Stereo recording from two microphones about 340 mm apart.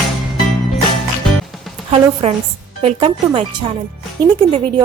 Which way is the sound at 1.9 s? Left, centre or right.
Centre.